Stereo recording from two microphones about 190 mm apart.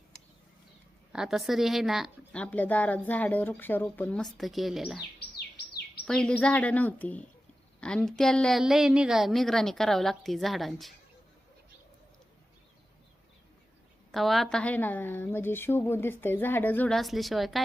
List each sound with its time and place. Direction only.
1.1 s speech: 5° right (ahead or behind)
6.1 s a woman's voice: 5° left (ahead or behind)
14.1 s a woman's voice: centre (ahead or behind)